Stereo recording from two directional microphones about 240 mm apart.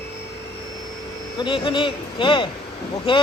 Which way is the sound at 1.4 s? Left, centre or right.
Left.